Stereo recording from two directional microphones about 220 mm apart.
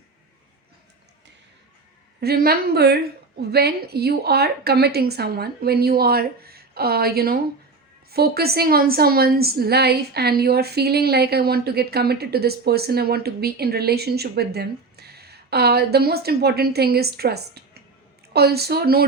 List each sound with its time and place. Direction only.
2.2 s a woman's voice: 45° right (ahead or behind)